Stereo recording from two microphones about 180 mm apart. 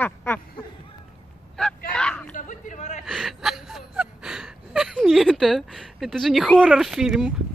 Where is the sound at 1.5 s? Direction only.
5° left (ahead or behind).